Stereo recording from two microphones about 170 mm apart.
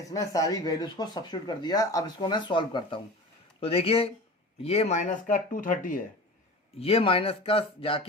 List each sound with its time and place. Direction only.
0.0 s speech: 20° left (ahead or behind); by 6.0 s 50° left (ahead or behind)
6.7 s speech: 35° left (ahead or behind)